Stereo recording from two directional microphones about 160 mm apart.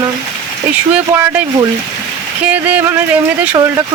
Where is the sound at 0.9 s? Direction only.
15° right (ahead or behind).